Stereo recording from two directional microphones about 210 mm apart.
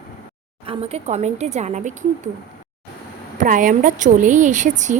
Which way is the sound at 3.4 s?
40° right (ahead or behind).